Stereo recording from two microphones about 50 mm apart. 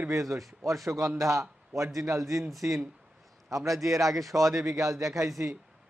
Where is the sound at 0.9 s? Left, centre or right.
Right.